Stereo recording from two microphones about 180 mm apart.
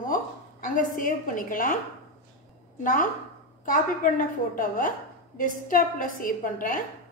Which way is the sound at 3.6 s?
50° left (ahead or behind).